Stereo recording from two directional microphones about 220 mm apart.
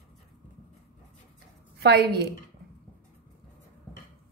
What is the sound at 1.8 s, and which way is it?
Speech, 45° right (ahead or behind).